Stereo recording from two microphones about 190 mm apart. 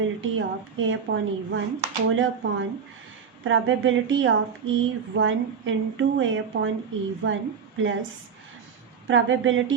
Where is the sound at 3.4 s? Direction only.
90° right.